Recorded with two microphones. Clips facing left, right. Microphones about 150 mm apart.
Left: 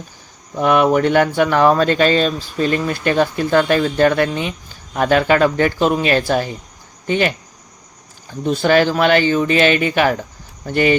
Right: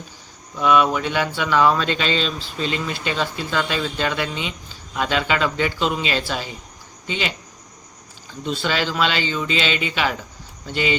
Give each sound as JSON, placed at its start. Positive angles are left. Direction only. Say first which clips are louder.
{"t": 0.5, "sound": "speech", "louder": "left 4 dB", "side_deg": 55}
{"t": 8.4, "sound": "speech", "louder": "left 9 dB", "side_deg": 50}